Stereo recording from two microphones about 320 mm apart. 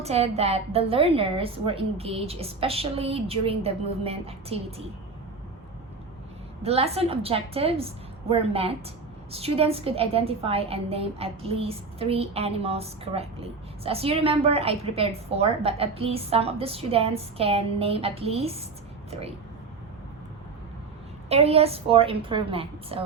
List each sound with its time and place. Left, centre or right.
0.0 s a woman's voice: centre
6.6 s a woman's voice: centre
21.2 s a woman's voice: centre